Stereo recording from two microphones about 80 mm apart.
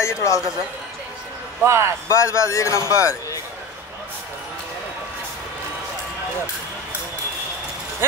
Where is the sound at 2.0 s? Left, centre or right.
Left.